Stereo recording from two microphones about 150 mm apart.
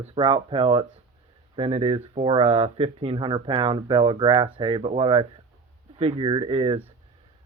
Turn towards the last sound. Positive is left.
turn(degrees=-40)  # may be behind; listen again after turning